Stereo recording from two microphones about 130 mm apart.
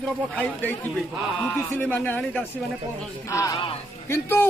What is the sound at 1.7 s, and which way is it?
Speech, 15° left (ahead or behind).